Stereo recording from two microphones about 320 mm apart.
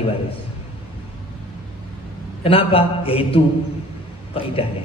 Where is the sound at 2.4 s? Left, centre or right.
Centre.